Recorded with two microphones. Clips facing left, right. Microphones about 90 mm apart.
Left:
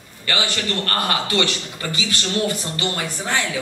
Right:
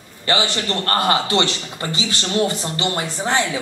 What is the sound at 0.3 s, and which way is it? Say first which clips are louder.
A man's voice: right 3 dB; 25° right (ahead or behind).